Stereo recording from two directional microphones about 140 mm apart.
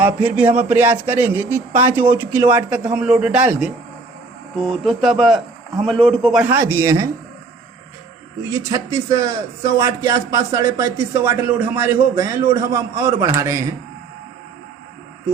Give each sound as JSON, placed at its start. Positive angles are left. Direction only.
{"t": 0.0, "sound": "a man's voice", "side_deg": -10}
{"t": 4.5, "sound": "speech", "side_deg": 5}
{"t": 6.4, "sound": "a man's voice", "side_deg": -15}
{"t": 8.4, "sound": "a man's voice", "side_deg": -20}